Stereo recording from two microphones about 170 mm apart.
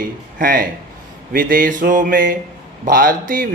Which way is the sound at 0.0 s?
55° right (ahead or behind).